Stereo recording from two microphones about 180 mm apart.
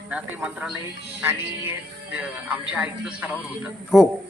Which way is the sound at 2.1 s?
10° right (ahead or behind).